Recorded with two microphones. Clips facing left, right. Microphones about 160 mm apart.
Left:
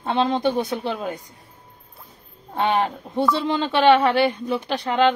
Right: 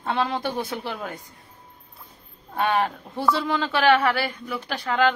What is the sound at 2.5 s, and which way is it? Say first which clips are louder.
Speech: left 2 dB; 25° left (ahead or behind).